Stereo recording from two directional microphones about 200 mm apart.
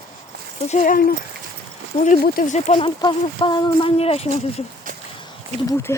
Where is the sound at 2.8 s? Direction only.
25° left (ahead or behind).